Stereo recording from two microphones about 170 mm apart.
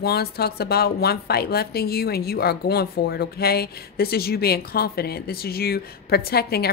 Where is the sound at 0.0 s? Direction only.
65° left (ahead or behind).